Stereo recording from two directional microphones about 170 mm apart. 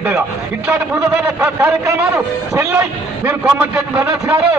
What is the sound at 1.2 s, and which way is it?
A man's voice, 10° right (ahead or behind).